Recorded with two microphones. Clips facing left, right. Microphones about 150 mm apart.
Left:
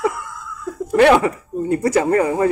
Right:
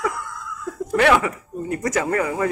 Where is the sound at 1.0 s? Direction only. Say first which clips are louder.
Left 5 dB; 35° left (ahead or behind).